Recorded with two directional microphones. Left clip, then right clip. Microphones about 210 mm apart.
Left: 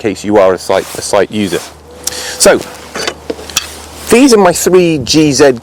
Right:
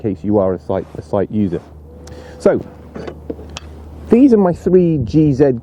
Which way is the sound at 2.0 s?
5° left (ahead or behind).